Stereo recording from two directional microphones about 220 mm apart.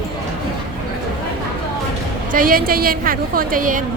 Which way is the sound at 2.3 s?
40° right (ahead or behind).